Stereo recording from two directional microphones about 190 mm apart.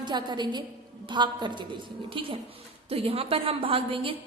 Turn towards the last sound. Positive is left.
turn(degrees=-30)  # may be behind; listen again after turning